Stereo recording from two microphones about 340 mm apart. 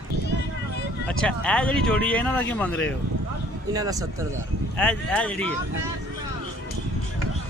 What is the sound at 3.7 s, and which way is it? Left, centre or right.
Speech, centre.